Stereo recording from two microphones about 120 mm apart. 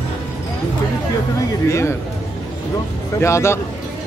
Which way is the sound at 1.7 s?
25° left (ahead or behind).